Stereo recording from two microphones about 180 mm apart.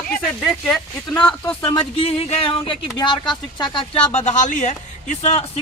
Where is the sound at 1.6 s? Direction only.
30° left (ahead or behind).